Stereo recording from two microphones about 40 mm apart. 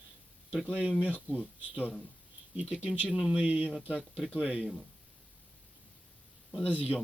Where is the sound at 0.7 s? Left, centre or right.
Right.